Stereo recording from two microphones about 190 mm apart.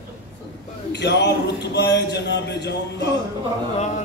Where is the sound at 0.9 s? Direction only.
65° left (ahead or behind).